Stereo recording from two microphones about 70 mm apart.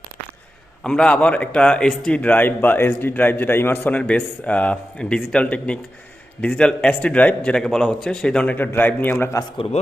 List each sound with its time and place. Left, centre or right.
0.9 s a man's voice: centre; by 3.9 s left
3.9 s speech: centre
7.5 s speech: centre
8.5 s a man's voice: left